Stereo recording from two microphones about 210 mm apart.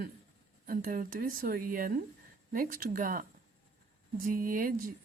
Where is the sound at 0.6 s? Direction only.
40° right (ahead or behind).